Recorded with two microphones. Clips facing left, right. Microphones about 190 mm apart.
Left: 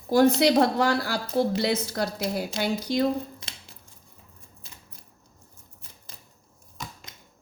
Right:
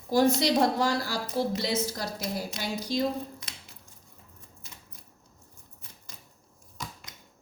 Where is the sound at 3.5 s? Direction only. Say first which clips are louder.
Left 2 dB; 30° left (ahead or behind).